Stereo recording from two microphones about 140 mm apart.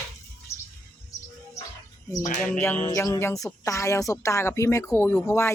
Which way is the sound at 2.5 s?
15° left (ahead or behind).